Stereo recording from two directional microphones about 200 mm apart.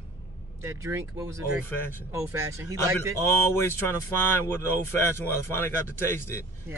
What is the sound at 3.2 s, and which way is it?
Speech, 10° left (ahead or behind).